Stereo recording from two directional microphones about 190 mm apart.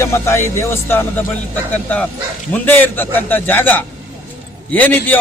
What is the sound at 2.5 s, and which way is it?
A man's voice, 10° left (ahead or behind).